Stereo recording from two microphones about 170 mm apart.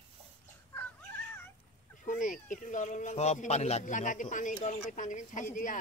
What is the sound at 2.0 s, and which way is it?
Speech, 50° left (ahead or behind).